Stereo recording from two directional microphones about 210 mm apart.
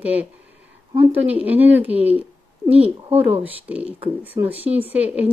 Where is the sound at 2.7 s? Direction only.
30° right (ahead or behind).